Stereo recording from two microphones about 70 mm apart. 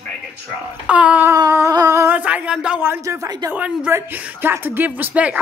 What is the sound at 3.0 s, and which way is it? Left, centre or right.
Humming, right.